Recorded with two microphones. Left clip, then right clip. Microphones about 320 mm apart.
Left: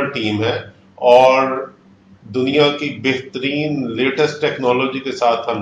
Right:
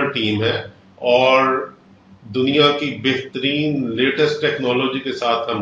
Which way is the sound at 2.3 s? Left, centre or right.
Centre.